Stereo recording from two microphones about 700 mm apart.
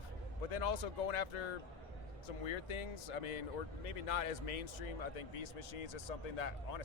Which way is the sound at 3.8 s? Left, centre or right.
Left.